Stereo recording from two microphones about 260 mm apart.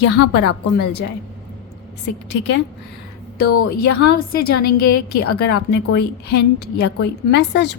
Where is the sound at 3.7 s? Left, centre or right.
Left.